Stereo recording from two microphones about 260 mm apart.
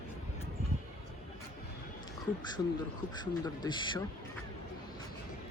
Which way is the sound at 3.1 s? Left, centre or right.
Centre.